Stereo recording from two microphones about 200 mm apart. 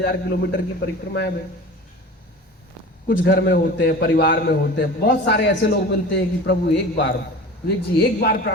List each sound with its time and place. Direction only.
0.0 s a man's voice: 55° left (ahead or behind)
3.1 s a man's voice: 60° left (ahead or behind)